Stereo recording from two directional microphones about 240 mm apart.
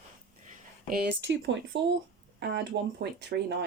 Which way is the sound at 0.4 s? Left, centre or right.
Right.